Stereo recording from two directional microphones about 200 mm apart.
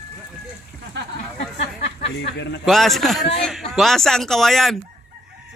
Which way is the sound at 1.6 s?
55° left (ahead or behind).